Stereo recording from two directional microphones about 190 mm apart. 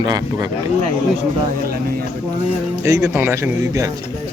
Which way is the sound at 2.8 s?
15° right (ahead or behind).